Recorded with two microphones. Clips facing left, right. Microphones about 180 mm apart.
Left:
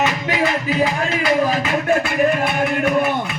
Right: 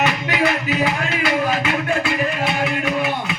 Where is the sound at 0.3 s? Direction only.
30° left (ahead or behind).